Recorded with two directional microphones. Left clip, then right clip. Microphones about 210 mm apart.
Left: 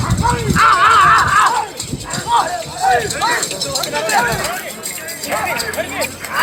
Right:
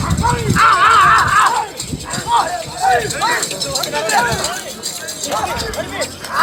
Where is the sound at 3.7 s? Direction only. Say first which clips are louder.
Even; 20° right (ahead or behind).